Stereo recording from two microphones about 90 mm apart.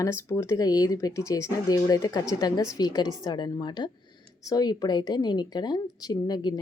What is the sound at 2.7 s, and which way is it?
Speech, 50° left (ahead or behind).